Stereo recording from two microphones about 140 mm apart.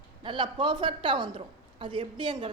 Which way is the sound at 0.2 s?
35° right (ahead or behind).